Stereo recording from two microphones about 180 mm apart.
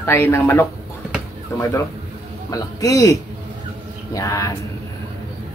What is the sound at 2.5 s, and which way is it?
Speech, 20° left (ahead or behind).